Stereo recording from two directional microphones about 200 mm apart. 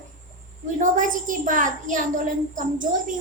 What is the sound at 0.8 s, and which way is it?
Child singing, 40° right (ahead or behind).